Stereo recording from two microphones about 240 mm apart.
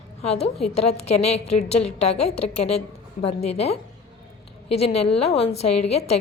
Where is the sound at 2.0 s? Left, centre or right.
Left.